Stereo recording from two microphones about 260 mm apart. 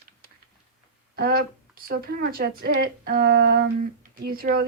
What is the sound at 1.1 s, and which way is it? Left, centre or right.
Speech, right.